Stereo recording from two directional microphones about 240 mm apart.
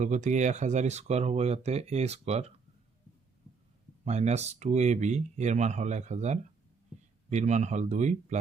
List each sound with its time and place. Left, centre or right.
0.0 s speech: right
4.0 s speech: right